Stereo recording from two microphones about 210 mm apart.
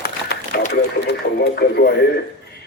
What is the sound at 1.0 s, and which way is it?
Speech, 55° left (ahead or behind).